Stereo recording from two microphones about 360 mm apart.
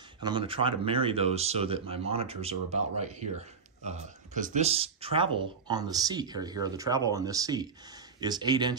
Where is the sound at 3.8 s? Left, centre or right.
Centre.